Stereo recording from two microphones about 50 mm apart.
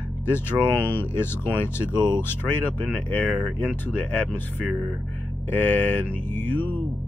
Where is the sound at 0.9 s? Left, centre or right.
Left.